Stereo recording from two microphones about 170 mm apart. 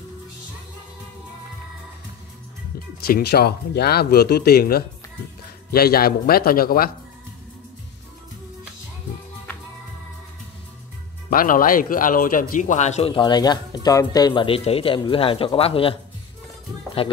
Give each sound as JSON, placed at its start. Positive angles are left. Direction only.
{"t": 3.1, "sound": "a man's voice", "side_deg": 65}
{"t": 11.2, "sound": "a man's voice", "side_deg": 55}
{"t": 17.0, "sound": "a man's voice", "side_deg": 35}